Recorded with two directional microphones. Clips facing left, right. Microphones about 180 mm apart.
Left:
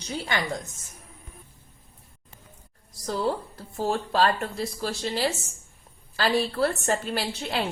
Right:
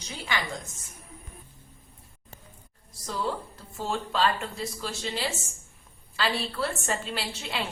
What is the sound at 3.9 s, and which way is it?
A woman's voice, 40° left (ahead or behind).